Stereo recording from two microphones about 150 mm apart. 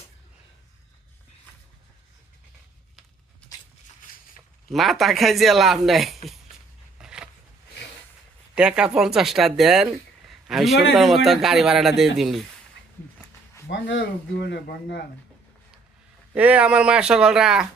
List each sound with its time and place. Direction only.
4.7 s speech: centre (ahead or behind)
7.0 s a sound: 5° right (ahead or behind)
8.5 s speech: 5° right (ahead or behind)
13.7 s speech: 90° left
16.3 s speech: 10° right (ahead or behind)